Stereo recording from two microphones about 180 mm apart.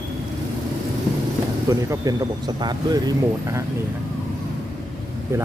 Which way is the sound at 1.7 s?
20° right (ahead or behind).